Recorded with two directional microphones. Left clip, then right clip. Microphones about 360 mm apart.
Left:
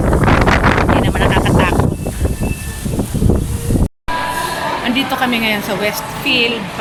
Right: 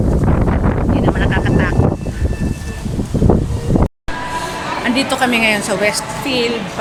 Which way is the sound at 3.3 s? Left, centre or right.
Right.